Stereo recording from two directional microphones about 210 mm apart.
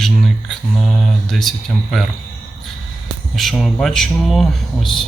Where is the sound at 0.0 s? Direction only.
Centre (ahead or behind).